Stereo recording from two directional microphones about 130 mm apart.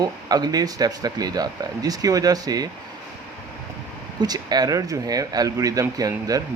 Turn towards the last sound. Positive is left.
turn(degrees=-30)  # may be behind; listen again after turning